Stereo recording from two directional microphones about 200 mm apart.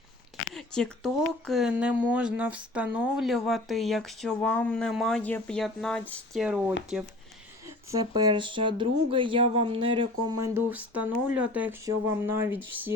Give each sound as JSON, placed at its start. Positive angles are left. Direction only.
{"t": 0.5, "sound": "speech", "side_deg": 0}
{"t": 7.9, "sound": "speech", "side_deg": -20}